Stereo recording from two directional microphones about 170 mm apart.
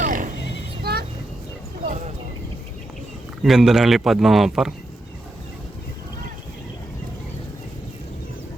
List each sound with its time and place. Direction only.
0.0 s a sound: 55° right (ahead or behind)
0.8 s vehicle: 65° right (ahead or behind)
3.4 s speech: centre (ahead or behind)